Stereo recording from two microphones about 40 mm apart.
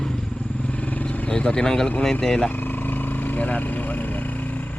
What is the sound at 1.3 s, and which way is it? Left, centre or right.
Speech, left.